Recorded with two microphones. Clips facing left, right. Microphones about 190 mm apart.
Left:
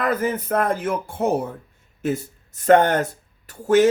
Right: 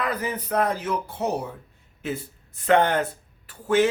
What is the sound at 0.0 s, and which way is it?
Speech, 45° left (ahead or behind).